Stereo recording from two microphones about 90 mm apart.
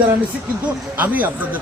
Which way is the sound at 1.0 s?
20° right (ahead or behind).